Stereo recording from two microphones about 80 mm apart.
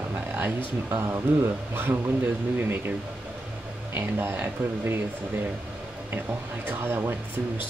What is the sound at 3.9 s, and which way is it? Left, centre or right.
Speech, right.